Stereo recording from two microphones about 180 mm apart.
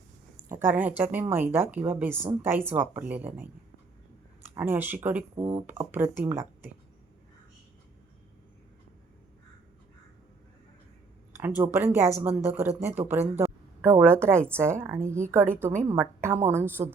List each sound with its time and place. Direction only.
0.4 s speech: 15° right (ahead or behind)
5.3 s speech: 30° right (ahead or behind)
5.9 s speech: 10° right (ahead or behind)
11.4 s speech: 10° right (ahead or behind)